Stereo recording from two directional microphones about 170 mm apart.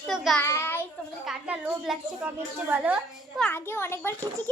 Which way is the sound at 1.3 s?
10° right (ahead or behind).